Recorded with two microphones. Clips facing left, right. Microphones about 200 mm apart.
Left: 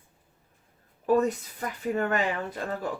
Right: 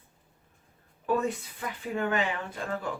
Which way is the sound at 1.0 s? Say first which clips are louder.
Left 5 dB; 40° left (ahead or behind).